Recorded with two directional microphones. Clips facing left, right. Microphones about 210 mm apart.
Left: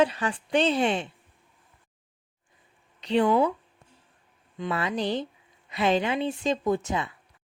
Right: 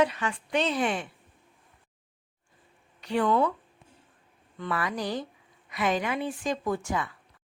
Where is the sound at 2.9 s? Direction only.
20° left (ahead or behind).